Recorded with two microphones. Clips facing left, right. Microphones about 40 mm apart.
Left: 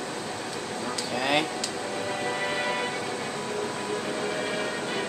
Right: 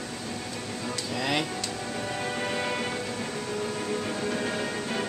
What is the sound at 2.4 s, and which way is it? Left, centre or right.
Music, centre.